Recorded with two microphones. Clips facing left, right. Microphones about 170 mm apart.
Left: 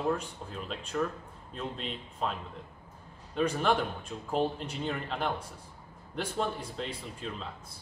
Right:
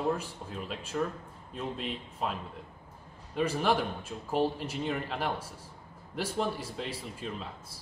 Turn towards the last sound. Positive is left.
turn(degrees=-5)  # may be behind; listen again after turning